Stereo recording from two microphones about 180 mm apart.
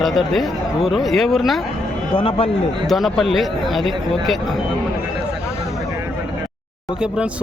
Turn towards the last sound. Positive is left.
turn(degrees=-5)  # may be behind; listen again after turning